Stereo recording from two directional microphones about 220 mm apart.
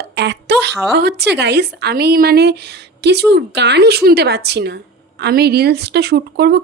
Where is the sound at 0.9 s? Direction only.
50° right (ahead or behind).